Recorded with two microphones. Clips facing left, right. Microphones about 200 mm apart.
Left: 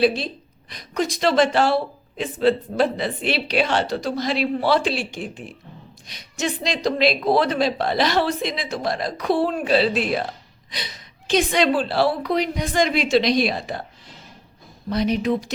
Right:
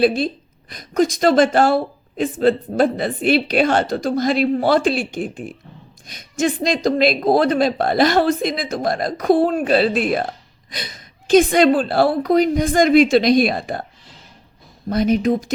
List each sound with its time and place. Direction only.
0.0 s a woman's voice: 50° right (ahead or behind)
14.8 s a woman's voice: 45° right (ahead or behind)